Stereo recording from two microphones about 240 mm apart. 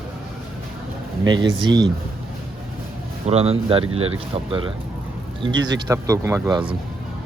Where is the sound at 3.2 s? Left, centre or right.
Right.